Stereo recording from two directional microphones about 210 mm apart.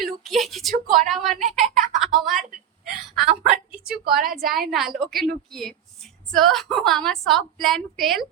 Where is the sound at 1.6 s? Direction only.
Centre (ahead or behind).